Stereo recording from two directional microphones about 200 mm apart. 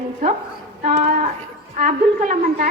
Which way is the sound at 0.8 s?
35° right (ahead or behind).